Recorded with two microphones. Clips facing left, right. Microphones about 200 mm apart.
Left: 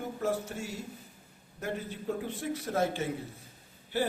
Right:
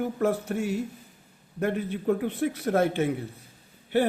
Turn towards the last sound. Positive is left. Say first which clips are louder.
# right 7 dB
turn(degrees=-60)  # may be behind; listen again after turning